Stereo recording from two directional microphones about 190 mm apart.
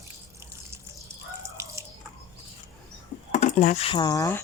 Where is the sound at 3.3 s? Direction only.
35° left (ahead or behind); by 4.4 s 15° left (ahead or behind).